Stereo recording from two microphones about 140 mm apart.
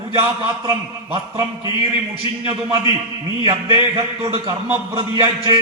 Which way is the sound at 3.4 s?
25° right (ahead or behind).